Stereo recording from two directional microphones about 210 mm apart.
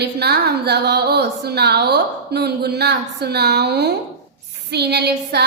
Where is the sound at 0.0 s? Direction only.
50° right (ahead or behind).